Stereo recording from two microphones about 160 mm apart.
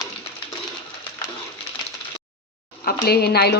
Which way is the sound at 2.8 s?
85° left.